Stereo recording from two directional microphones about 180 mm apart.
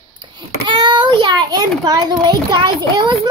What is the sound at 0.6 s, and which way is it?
A child's voice, 25° right (ahead or behind).